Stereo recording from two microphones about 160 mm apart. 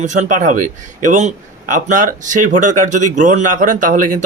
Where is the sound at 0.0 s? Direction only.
50° right (ahead or behind).